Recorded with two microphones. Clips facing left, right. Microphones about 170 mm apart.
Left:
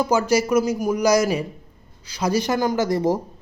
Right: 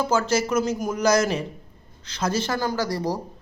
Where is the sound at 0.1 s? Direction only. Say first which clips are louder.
Left 5 dB; 15° left (ahead or behind).